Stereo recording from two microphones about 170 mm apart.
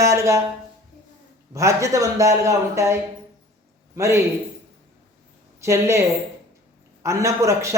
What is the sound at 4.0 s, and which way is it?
Speech, 15° right (ahead or behind).